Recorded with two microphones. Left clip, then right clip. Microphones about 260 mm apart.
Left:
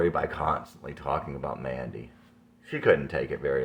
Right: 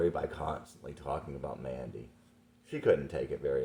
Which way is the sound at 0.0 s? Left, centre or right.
Left.